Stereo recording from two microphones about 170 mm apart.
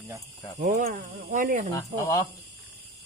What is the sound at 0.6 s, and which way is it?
Speech, 50° right (ahead or behind).